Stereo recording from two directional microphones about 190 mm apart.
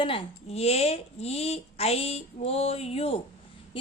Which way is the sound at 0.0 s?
30° left (ahead or behind).